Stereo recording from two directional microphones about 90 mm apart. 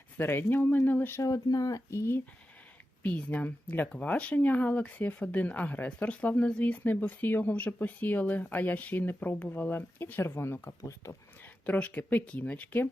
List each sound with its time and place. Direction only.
0.2 s speech: 25° left (ahead or behind)
1.2 s speech: 40° left (ahead or behind)
3.0 s speech: 15° left (ahead or behind); by 11.2 s 35° left (ahead or behind)
11.6 s speech: 15° left (ahead or behind)